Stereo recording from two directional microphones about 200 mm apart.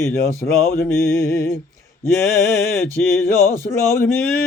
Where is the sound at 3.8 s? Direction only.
15° left (ahead or behind).